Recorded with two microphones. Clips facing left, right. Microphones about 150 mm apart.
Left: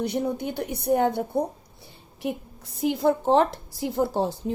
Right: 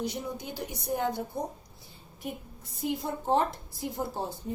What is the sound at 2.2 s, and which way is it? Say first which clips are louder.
A woman's voice: left 8 dB; 80° left.